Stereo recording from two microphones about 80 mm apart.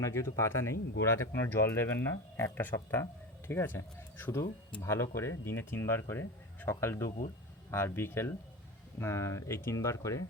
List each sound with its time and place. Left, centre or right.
0.0 s speech: left